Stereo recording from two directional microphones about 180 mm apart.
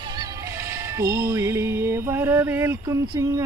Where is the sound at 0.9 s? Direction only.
15° right (ahead or behind).